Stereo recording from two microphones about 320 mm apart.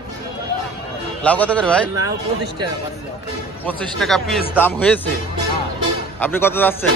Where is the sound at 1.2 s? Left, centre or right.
Centre.